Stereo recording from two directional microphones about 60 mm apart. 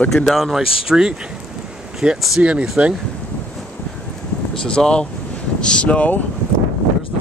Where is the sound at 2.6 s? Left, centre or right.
Centre.